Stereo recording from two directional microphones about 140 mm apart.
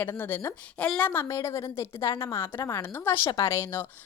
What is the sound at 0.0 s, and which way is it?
A woman's voice, 15° left (ahead or behind).